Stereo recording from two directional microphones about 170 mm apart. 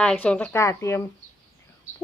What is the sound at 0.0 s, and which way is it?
Speech, 5° left (ahead or behind).